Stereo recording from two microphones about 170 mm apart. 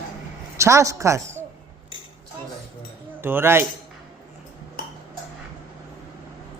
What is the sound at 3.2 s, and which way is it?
Speech, 15° right (ahead or behind).